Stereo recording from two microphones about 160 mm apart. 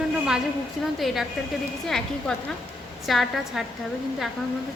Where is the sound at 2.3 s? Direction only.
5° left (ahead or behind).